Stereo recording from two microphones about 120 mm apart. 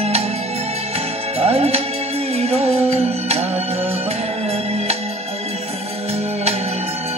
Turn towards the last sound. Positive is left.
turn(degrees=-60)  # may be behind; listen again after turning